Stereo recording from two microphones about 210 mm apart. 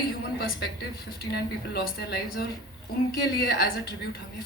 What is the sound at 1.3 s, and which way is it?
Speech, 50° left (ahead or behind).